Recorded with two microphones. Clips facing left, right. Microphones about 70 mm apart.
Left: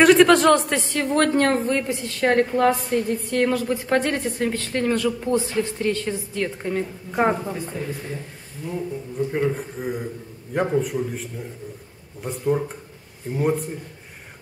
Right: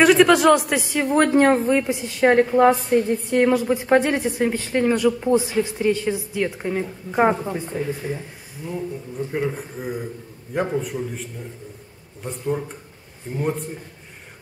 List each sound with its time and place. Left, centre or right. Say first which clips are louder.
0.0 s a woman's voice: even; centre
8.6 s a woman's voice: even; centre